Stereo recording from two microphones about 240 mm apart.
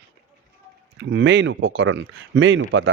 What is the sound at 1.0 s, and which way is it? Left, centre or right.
Speech, right.